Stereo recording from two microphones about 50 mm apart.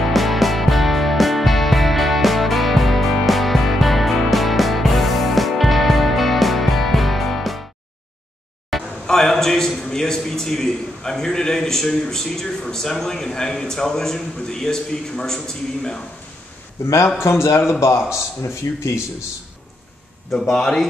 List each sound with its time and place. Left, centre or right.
0.0 s music: centre
9.0 s a man's voice: centre
17.2 s a man's voice: left
20.2 s speech: centre
20.5 s a man's voice: centre